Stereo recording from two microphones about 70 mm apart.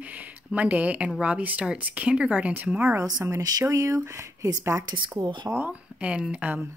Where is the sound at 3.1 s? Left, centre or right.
Right.